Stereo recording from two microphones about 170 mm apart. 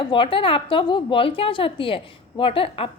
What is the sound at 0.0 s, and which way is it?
A woman's voice, 30° left (ahead or behind).